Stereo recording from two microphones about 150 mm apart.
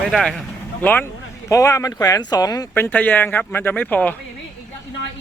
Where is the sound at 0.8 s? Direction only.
10° left (ahead or behind).